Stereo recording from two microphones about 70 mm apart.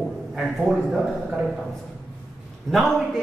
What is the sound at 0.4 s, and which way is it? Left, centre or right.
Speech, centre.